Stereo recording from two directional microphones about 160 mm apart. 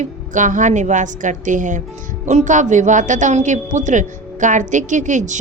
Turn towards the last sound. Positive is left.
turn(degrees=-50)  # may be behind; listen again after turning